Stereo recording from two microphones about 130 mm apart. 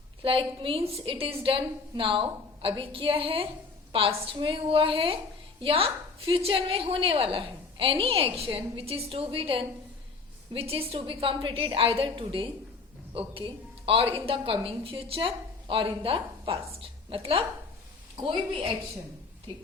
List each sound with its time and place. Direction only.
0.2 s a woman's voice: 45° right (ahead or behind)